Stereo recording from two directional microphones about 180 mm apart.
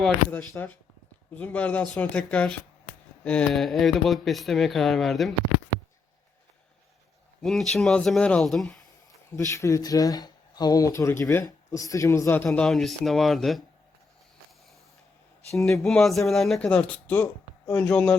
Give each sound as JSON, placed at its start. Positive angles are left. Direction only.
{"t": 0.0, "sound": "speech", "side_deg": 10}
{"t": 7.4, "sound": "speech", "side_deg": 0}
{"t": 9.5, "sound": "speech", "side_deg": 15}
{"t": 12.5, "sound": "speech", "side_deg": 0}
{"t": 15.8, "sound": "speech", "side_deg": 5}